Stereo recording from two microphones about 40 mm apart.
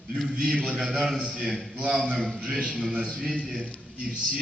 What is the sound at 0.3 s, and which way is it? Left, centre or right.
Speech, right.